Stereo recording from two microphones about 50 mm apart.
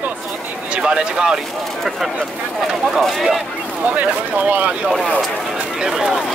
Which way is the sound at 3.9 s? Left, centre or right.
Right.